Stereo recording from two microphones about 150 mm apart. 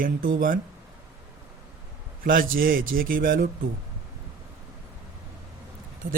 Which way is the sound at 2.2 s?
70° right (ahead or behind).